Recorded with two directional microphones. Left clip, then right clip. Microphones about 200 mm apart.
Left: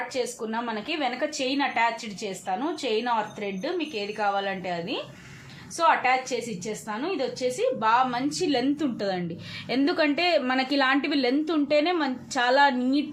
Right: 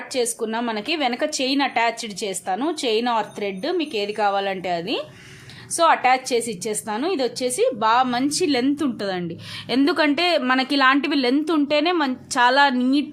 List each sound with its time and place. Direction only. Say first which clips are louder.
0.1 s a woman's voice: right 6 dB; 35° right (ahead or behind)